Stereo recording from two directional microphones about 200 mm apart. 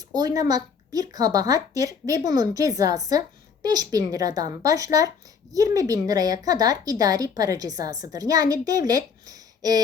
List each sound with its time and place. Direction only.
0.3 s a child's voice: 20° right (ahead or behind)